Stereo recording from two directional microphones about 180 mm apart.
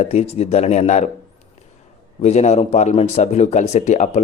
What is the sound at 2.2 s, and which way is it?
A man's voice, 40° left (ahead or behind).